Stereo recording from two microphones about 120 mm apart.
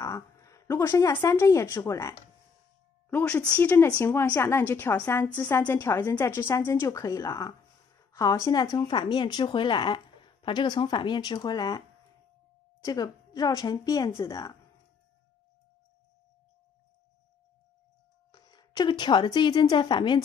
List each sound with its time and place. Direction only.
0.0 s a sound: 25° left (ahead or behind)
1.2 s speech: 25° left (ahead or behind)
3.1 s a woman's voice: 15° left (ahead or behind); by 11.8 s 30° left (ahead or behind)
12.8 s speech: 30° left (ahead or behind)
18.3 s a woman's voice: 35° left (ahead or behind)